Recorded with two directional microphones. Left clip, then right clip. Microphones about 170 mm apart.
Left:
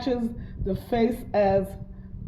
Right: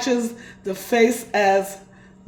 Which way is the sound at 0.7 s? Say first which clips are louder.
Right 7 dB; 20° right (ahead or behind).